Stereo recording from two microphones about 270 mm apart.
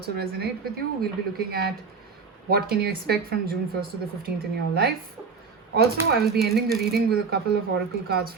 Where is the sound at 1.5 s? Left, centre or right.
Right.